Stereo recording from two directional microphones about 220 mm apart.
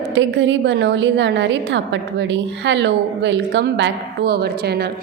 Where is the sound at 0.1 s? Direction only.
55° right (ahead or behind).